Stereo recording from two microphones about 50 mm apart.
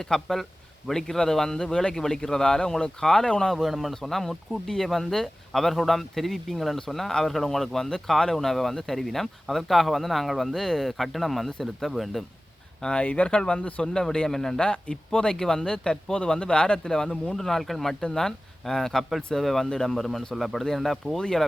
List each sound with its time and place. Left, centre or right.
0.0 s speech: centre
3.5 s a man's voice: centre
12.8 s speech: centre
13.8 s speech: centre
14.7 s a man's voice: centre